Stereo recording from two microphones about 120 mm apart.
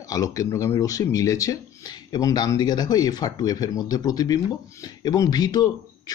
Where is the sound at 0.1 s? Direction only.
30° left (ahead or behind).